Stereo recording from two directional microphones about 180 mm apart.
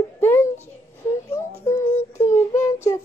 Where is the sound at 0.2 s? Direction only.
10° left (ahead or behind).